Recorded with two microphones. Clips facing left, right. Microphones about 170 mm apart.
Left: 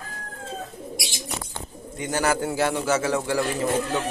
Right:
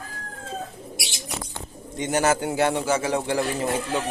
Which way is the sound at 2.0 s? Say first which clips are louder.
Right 2 dB; 20° right (ahead or behind).